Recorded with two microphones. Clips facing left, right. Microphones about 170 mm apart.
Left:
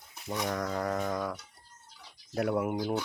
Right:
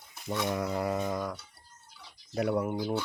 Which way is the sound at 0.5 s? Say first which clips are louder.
Even; 10° right (ahead or behind).